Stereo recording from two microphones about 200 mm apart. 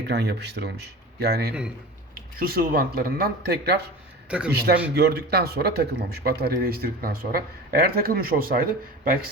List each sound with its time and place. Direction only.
0.1 s speech: 55° right (ahead or behind)
4.3 s a man's voice: 5° right (ahead or behind)
4.9 s speech: 55° right (ahead or behind)